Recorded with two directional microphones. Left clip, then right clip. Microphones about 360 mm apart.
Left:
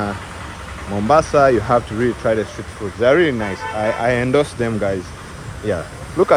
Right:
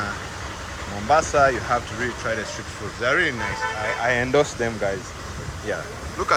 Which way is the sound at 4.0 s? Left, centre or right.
Left.